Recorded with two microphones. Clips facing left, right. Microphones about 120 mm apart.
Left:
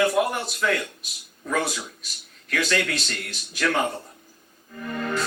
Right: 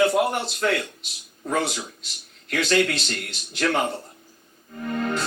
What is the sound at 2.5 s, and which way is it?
Music, 25° right (ahead or behind).